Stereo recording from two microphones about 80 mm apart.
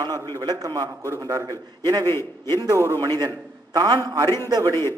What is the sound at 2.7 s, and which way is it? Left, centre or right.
Speech, right.